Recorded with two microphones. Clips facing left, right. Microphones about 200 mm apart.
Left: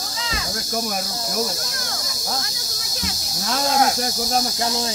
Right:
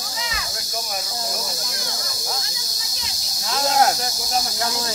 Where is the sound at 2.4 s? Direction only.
55° left (ahead or behind).